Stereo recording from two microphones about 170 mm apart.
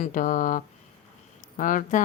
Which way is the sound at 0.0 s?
50° left (ahead or behind).